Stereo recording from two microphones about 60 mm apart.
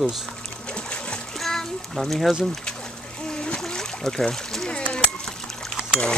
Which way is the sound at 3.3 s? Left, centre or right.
Centre.